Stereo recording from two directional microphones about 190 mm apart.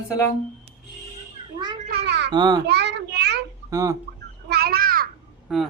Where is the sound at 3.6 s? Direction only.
15° right (ahead or behind).